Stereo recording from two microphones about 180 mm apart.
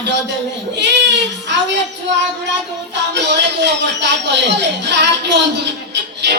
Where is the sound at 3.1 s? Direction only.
75° right (ahead or behind).